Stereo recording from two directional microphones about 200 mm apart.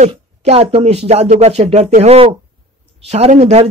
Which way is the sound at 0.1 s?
30° right (ahead or behind).